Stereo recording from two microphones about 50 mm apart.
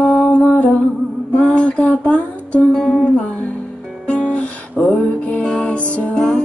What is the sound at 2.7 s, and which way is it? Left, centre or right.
Music, centre.